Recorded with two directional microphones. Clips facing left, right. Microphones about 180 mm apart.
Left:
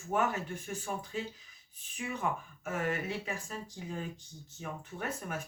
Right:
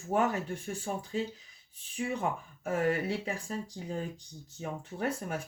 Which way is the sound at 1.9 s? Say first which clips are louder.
Right 3 dB; 30° right (ahead or behind).